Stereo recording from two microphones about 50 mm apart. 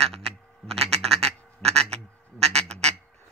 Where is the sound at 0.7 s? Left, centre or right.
Centre.